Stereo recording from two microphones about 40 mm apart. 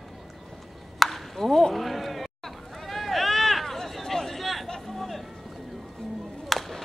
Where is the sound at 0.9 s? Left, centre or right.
Centre.